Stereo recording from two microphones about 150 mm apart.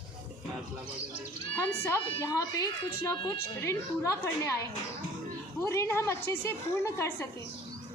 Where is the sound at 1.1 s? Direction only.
15° left (ahead or behind).